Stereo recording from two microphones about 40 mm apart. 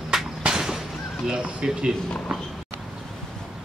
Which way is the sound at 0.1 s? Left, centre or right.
Centre.